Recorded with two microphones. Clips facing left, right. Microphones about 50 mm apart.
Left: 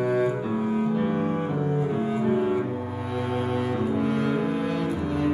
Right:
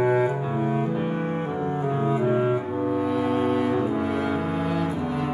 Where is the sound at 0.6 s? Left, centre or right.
Centre.